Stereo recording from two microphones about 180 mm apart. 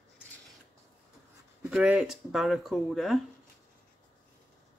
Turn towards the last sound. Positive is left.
turn(degrees=0)  # may be behind; listen again after turning